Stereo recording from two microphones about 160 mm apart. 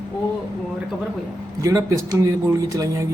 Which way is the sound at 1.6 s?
20° right (ahead or behind).